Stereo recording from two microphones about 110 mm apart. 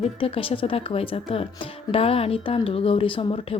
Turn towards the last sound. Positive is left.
turn(degrees=50)  # may be behind; listen again after turning